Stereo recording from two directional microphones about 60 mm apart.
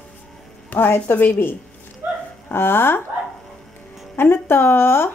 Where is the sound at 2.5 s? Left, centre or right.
Left.